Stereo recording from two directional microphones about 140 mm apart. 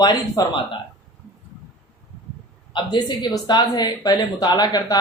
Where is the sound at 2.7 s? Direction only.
30° left (ahead or behind).